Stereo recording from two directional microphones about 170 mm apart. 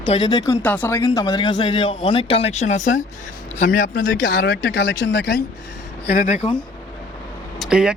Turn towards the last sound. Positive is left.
turn(degrees=-5)  # may be behind; listen again after turning